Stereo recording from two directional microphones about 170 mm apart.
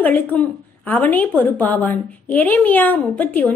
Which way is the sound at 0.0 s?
10° left (ahead or behind).